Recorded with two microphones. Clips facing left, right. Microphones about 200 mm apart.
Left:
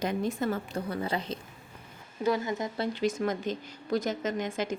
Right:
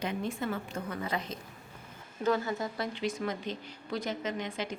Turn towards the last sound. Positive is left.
turn(degrees=45)  # may be behind; listen again after turning